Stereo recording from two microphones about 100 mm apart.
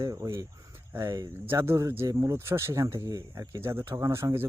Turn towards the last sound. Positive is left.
turn(degrees=-25)  # may be behind; listen again after turning